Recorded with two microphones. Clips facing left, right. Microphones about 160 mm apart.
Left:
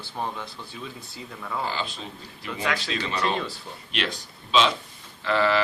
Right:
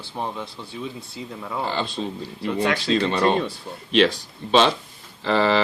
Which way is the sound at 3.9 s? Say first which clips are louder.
Right 13 dB; 65° right (ahead or behind).